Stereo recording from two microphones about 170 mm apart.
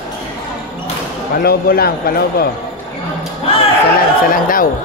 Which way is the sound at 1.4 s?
60° left (ahead or behind).